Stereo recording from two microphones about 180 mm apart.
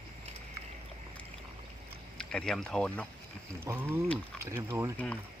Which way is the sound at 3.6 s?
15° right (ahead or behind).